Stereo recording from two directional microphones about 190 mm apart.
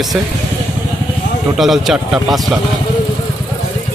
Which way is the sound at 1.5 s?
Centre (ahead or behind).